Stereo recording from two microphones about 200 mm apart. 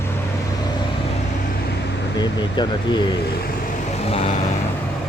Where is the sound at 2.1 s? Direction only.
20° left (ahead or behind).